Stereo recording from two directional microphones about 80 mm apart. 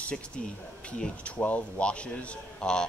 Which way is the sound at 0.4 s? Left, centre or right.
Centre.